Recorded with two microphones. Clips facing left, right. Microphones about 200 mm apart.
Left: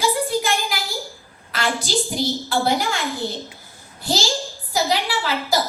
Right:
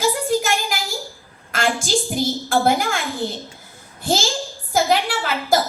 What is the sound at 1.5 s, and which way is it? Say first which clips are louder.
A woman's voice: right 2 dB; 50° right (ahead or behind).